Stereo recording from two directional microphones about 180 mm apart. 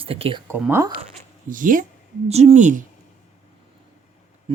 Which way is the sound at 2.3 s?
35° right (ahead or behind).